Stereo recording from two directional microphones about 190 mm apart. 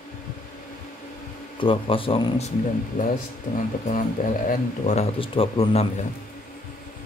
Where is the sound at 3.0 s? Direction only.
45° left (ahead or behind).